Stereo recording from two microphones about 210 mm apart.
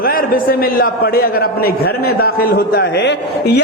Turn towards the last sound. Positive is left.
turn(degrees=55)  # may be behind; listen again after turning